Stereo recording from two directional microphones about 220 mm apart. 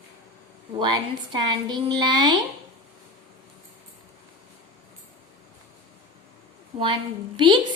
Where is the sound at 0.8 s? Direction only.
20° right (ahead or behind).